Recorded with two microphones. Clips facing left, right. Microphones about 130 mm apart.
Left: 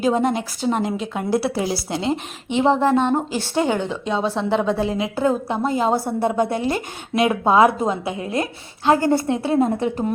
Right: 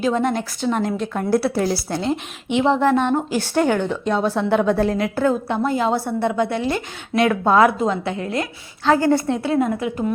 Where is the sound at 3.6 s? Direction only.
20° left (ahead or behind).